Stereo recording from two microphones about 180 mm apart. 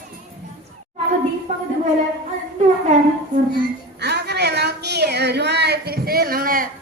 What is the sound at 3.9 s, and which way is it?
A woman's voice, 65° right (ahead or behind).